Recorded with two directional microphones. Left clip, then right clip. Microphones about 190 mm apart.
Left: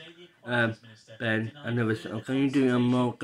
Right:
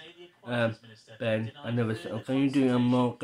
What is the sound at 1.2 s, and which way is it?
Speech, 5° left (ahead or behind).